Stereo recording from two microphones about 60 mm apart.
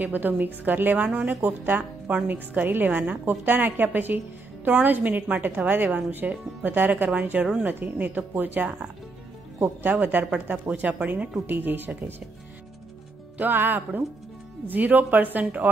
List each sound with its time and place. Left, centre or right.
0.0 s a woman's voice: right
13.4 s a woman's voice: right